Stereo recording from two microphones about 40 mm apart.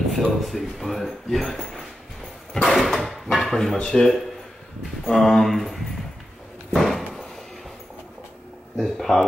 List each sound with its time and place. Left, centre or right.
0.1 s speech: centre
3.7 s speech: centre
5.0 s speech: centre
6.8 s a sound: centre
8.8 s speech: centre